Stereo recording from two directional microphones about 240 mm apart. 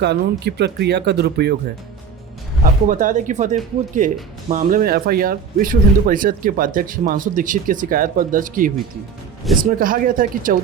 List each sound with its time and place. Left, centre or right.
0.0 s speech: right
2.8 s speech: right